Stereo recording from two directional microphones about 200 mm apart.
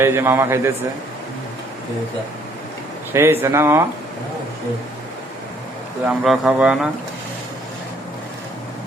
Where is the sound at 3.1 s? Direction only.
10° right (ahead or behind).